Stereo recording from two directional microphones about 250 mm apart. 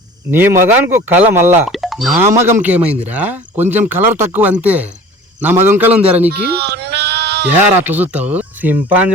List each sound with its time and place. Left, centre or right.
0.3 s speech: centre
6.4 s bleat: right
7.5 s speech: centre